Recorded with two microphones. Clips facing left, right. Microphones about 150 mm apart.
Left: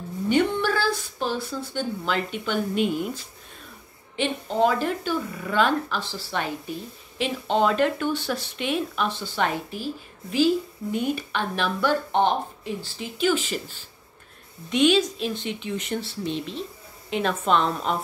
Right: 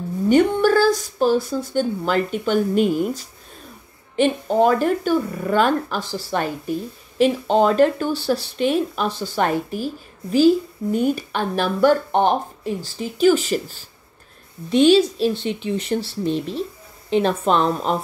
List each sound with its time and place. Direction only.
0.3 s a woman's voice: 45° right (ahead or behind)